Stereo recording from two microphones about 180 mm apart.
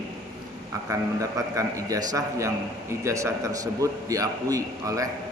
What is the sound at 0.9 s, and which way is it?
A man's voice, 15° right (ahead or behind).